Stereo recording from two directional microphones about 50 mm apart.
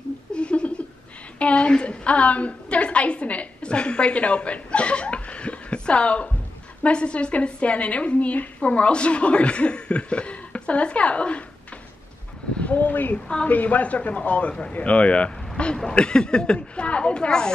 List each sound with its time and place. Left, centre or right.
0.3 s laughter: left
1.4 s a woman's voice: left
12.5 s a sound: left
13.3 s speech: left